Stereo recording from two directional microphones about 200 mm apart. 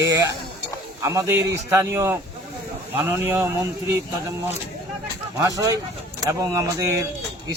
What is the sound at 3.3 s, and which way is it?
Speech, 10° right (ahead or behind).